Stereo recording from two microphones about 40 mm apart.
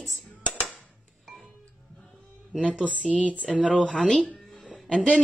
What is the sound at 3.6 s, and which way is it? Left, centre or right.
Speech, right.